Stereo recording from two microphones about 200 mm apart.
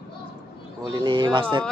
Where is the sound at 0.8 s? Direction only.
20° right (ahead or behind).